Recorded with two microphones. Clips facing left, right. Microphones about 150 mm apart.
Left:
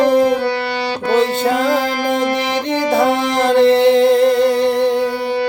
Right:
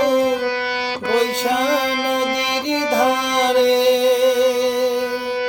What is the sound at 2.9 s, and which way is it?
Music, 15° right (ahead or behind).